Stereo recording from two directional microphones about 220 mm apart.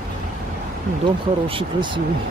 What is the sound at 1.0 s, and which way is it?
Speech, 20° right (ahead or behind).